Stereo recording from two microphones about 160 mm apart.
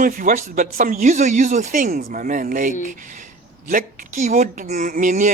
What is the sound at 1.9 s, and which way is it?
Speech, 65° right (ahead or behind).